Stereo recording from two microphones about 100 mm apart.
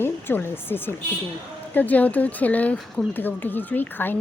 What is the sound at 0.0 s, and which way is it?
Speech, 20° left (ahead or behind).